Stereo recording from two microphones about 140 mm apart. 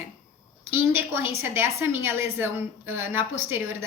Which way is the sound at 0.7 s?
15° right (ahead or behind).